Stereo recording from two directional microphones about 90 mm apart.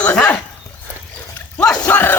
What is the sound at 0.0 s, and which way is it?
Horse, 15° left (ahead or behind).